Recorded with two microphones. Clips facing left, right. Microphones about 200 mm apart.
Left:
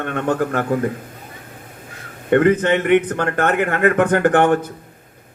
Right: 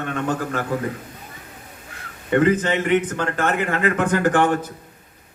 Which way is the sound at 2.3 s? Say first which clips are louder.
Left 4 dB; 55° left (ahead or behind).